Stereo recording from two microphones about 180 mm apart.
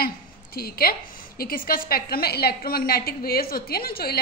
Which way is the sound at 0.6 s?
55° left (ahead or behind).